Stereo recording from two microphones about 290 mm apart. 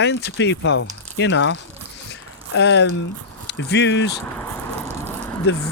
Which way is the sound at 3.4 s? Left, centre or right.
Left.